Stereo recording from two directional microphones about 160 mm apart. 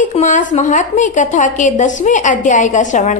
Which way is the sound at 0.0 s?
50° left (ahead or behind).